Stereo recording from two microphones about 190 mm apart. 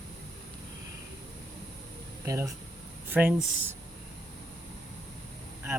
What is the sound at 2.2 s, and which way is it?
Speech, 15° right (ahead or behind).